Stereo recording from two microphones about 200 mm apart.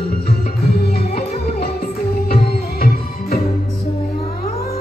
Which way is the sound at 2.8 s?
50° left (ahead or behind).